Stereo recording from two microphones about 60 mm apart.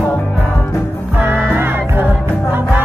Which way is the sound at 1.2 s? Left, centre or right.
Right.